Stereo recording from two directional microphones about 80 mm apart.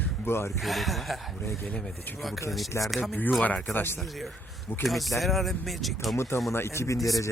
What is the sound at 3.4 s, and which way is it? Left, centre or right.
Speech, left.